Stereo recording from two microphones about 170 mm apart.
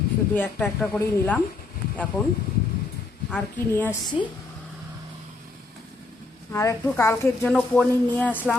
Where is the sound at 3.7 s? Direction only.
10° left (ahead or behind).